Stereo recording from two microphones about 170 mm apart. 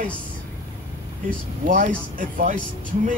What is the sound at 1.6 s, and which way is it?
Speech, 50° right (ahead or behind).